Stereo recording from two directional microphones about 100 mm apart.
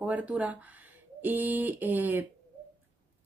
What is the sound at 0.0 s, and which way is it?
Speech, 15° right (ahead or behind).